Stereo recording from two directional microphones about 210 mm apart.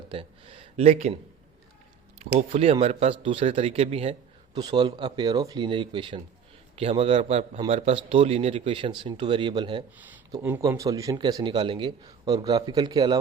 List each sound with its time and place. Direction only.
0.1 s speech: 25° right (ahead or behind)
2.5 s speech: 25° right (ahead or behind)
10.0 s speech: 10° right (ahead or behind)